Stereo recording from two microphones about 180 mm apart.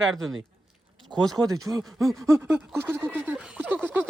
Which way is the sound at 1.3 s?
20° right (ahead or behind).